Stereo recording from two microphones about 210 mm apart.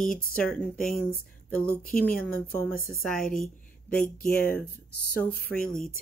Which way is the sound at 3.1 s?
40° left (ahead or behind).